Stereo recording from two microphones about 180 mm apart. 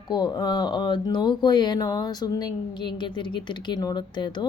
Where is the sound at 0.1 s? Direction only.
25° left (ahead or behind).